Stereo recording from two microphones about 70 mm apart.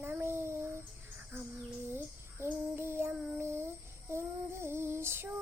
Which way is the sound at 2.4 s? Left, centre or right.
Right.